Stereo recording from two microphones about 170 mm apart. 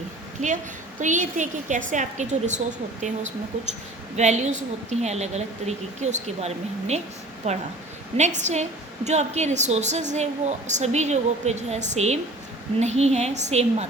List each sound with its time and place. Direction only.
0.4 s a woman's voice: 45° right (ahead or behind)
4.2 s a woman's voice: 45° right (ahead or behind)
8.1 s a woman's voice: 45° right (ahead or behind)